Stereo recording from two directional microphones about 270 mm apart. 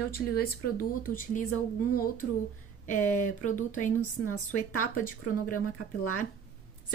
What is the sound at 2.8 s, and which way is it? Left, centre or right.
Speech, left.